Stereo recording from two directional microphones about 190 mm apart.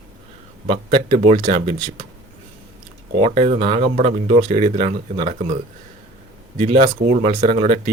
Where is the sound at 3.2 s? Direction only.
35° right (ahead or behind).